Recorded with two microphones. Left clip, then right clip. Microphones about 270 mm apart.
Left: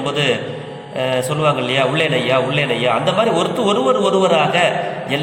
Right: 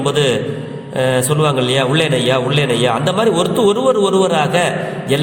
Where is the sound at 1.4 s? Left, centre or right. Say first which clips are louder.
Right 1 dB; right.